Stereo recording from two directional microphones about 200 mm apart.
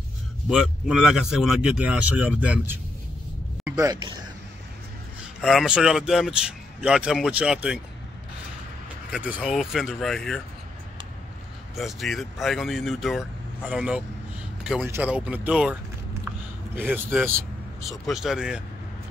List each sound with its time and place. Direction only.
0.5 s a man's voice: 5° right (ahead or behind)
5.4 s a man's voice: centre (ahead or behind)
9.1 s a man's voice: 5° right (ahead or behind)
11.7 s a man's voice: centre (ahead or behind)